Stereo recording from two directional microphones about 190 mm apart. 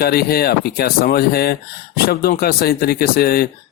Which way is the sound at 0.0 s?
55° left (ahead or behind).